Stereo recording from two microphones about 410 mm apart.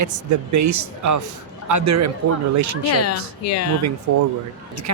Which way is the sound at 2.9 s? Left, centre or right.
Left.